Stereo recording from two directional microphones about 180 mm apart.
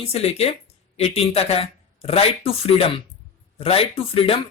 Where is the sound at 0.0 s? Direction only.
35° left (ahead or behind).